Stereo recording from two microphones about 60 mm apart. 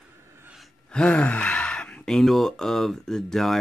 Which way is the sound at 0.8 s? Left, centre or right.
Centre.